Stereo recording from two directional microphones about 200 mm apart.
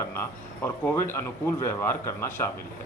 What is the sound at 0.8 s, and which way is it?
Speech, 10° left (ahead or behind).